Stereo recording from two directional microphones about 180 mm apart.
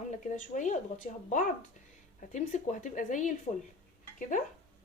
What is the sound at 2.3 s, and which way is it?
Speech, 45° left (ahead or behind).